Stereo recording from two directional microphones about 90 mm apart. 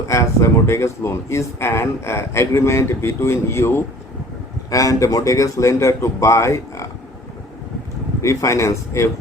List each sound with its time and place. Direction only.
0.1 s speech: 35° left (ahead or behind)
4.7 s speech: 40° left (ahead or behind)
8.2 s speech: 30° left (ahead or behind)